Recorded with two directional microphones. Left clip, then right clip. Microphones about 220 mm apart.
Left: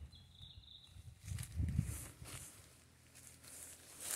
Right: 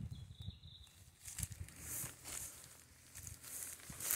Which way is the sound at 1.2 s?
45° right (ahead or behind).